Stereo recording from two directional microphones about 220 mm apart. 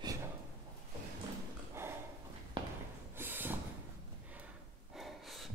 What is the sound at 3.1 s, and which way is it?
Snort, 10° right (ahead or behind).